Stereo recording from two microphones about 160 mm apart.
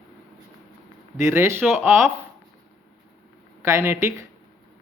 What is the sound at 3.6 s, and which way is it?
Speech, 15° right (ahead or behind).